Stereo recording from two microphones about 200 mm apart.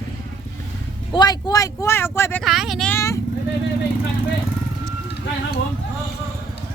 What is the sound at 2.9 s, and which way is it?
Speech, 15° left (ahead or behind).